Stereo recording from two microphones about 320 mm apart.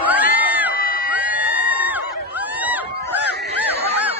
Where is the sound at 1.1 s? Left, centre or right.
Centre.